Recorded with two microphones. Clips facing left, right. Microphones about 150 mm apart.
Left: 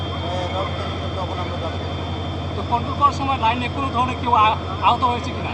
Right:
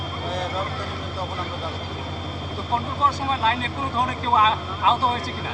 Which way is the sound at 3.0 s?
15° left (ahead or behind).